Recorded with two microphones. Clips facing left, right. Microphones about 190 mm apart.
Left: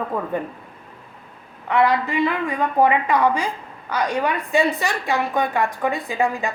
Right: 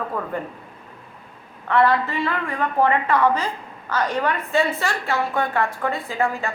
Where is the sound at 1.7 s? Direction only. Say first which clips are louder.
Even; 15° left (ahead or behind).